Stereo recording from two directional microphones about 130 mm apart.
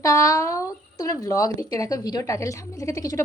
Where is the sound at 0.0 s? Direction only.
25° left (ahead or behind).